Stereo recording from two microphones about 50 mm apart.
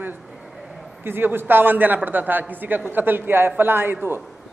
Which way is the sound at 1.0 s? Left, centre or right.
Right.